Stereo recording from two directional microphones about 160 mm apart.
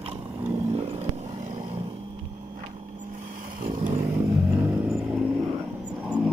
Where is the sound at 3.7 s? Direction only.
50° right (ahead or behind).